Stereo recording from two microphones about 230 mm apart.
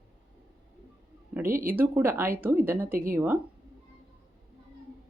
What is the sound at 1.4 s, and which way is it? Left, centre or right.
Speech, right.